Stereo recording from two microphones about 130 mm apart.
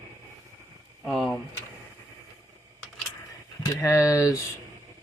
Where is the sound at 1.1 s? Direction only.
Centre (ahead or behind).